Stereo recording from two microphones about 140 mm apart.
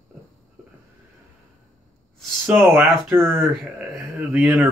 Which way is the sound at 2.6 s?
20° right (ahead or behind).